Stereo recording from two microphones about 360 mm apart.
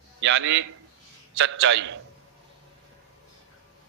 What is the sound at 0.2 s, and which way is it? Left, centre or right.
A man's voice, right.